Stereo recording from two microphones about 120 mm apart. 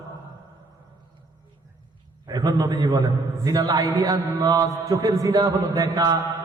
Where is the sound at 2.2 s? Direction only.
35° right (ahead or behind).